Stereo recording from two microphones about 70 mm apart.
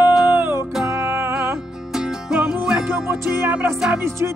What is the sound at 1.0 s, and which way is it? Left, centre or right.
Music, right.